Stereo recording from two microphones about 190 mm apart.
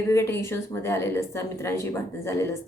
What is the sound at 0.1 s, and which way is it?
A woman's voice, 15° left (ahead or behind).